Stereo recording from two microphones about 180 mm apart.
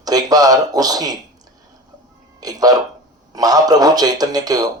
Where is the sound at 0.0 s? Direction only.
20° right (ahead or behind).